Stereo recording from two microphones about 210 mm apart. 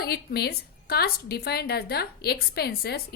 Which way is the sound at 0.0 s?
50° left (ahead or behind).